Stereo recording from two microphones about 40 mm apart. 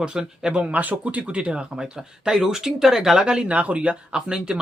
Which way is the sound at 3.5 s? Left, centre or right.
Right.